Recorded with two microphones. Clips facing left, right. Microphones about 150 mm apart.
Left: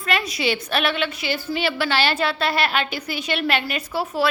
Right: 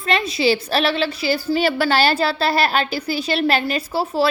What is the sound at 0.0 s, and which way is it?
A woman's voice, 25° right (ahead or behind).